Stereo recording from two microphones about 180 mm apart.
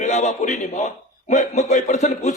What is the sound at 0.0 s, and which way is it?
A man's voice, 40° left (ahead or behind).